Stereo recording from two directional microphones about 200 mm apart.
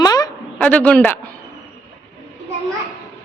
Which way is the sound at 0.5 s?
5° left (ahead or behind).